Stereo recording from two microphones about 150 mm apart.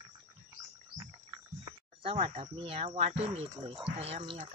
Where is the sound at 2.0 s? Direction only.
40° right (ahead or behind).